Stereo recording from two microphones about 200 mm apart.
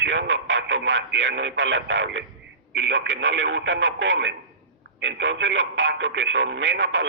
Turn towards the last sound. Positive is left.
turn(degrees=-65)  # may be behind; listen again after turning